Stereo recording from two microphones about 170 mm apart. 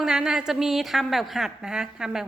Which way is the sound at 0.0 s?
5° right (ahead or behind).